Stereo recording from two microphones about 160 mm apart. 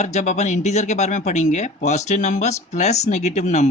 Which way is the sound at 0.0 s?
45° left (ahead or behind).